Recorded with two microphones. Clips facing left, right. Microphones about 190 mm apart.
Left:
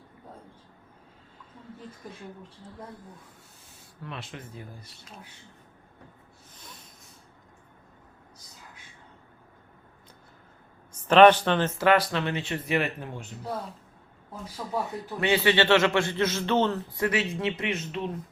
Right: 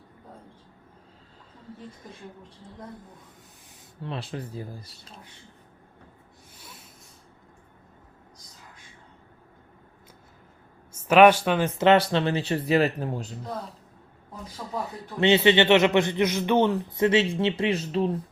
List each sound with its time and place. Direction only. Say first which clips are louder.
4.0 s speech: right 6 dB; 30° right (ahead or behind)
11.1 s a man's voice: even; 10° right (ahead or behind); by 13.3 s 35° right (ahead or behind)
14.6 s speech: left 2 dB; 5° left (ahead or behind)
15.2 s a man's voice: right 4 dB; 25° right (ahead or behind)